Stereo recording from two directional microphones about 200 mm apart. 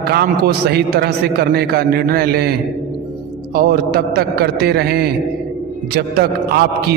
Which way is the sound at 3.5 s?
50° right (ahead or behind).